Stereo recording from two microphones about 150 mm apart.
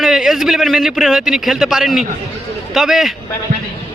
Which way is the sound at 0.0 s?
Centre (ahead or behind).